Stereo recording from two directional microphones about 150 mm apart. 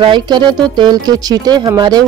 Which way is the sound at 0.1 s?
30° right (ahead or behind).